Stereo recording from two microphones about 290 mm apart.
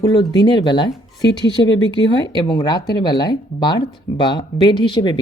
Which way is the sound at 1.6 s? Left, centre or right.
Left.